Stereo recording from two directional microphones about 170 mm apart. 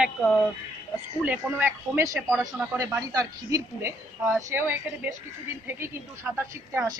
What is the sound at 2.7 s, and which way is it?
A woman's voice, 20° right (ahead or behind).